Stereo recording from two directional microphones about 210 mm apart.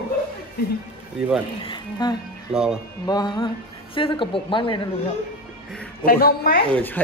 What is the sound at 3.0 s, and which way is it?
Speech, 20° left (ahead or behind).